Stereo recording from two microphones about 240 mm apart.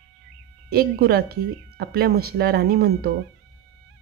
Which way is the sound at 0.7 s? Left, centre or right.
Right.